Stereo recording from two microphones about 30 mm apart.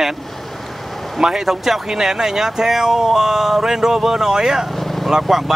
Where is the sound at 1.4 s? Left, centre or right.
Centre.